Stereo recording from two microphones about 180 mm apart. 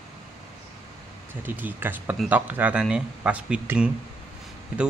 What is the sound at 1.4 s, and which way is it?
A man's voice, 10° right (ahead or behind).